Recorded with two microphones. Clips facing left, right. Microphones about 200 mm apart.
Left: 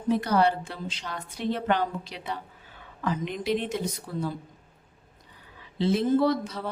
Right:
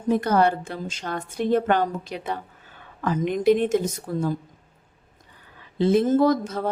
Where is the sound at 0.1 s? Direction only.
50° right (ahead or behind).